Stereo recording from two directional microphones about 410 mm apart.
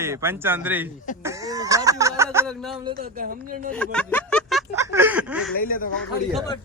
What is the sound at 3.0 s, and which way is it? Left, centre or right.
Speech, right.